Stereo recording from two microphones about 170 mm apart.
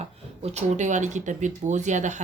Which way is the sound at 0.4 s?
45° right (ahead or behind).